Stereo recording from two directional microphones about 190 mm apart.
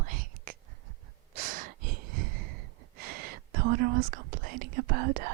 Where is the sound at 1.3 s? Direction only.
45° right (ahead or behind).